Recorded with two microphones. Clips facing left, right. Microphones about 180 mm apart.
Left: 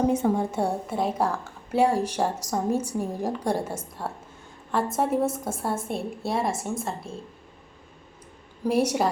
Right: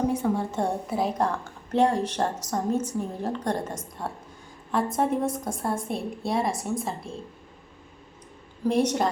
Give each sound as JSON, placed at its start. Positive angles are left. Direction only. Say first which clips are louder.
{"t": 0.1, "sound": "a woman's voice", "louder": "left 2 dB", "side_deg": 25}
{"t": 0.9, "sound": "a woman's voice", "louder": "even", "side_deg": 0}
{"t": 8.6, "sound": "a woman's voice", "louder": "even", "side_deg": 10}